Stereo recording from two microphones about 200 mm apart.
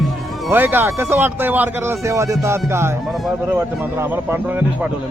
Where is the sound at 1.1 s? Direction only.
10° right (ahead or behind).